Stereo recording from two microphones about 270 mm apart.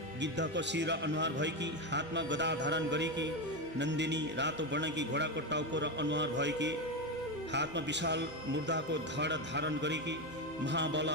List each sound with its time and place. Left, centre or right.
0.2 s a man's voice: right